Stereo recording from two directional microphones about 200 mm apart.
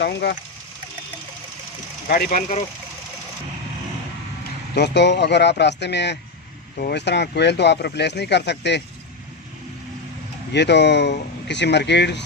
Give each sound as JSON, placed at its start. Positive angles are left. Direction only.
{"t": 0.0, "sound": "speech", "side_deg": 55}
{"t": 2.0, "sound": "speech", "side_deg": 45}
{"t": 4.7, "sound": "speech", "side_deg": 60}
{"t": 10.5, "sound": "speech", "side_deg": 60}